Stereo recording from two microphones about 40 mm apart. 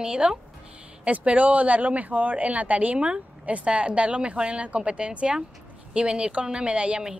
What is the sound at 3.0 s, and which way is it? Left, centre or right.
Speech, right.